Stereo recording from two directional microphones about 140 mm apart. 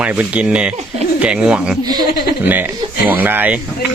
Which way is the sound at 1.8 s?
30° right (ahead or behind).